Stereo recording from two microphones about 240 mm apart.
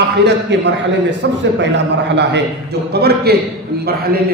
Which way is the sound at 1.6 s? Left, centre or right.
Right.